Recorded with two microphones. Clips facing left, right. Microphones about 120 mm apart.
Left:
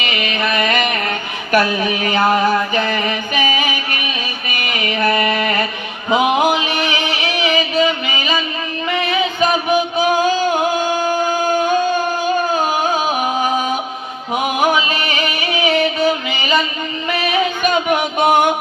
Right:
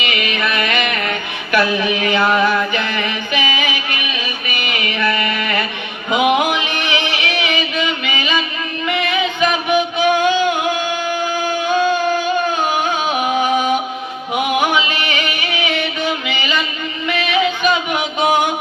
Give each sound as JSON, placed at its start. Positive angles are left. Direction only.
{"t": 0.0, "sound": "music", "side_deg": 35}